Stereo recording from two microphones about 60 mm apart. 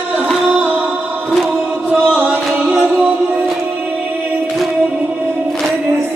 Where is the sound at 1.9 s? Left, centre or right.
Right.